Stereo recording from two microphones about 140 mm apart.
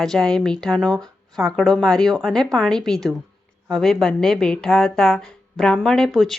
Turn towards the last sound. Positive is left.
turn(degrees=0)  # may be behind; listen again after turning